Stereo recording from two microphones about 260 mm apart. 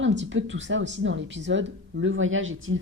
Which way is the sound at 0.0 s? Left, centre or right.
Right.